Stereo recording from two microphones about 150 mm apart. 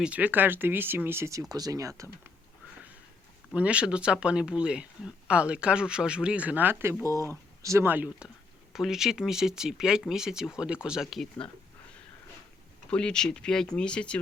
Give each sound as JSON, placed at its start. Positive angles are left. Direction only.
{"t": 0.0, "sound": "speech", "side_deg": -10}
{"t": 3.5, "sound": "speech", "side_deg": -10}
{"t": 12.9, "sound": "speech", "side_deg": 5}